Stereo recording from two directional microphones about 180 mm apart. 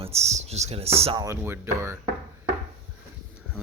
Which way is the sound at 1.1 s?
15° right (ahead or behind).